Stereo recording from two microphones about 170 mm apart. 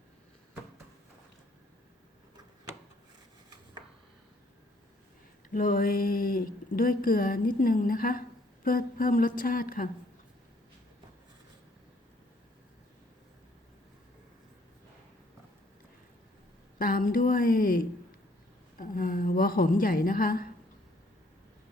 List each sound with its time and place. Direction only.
5.5 s speech: 55° left (ahead or behind)
16.7 s speech: 55° left (ahead or behind)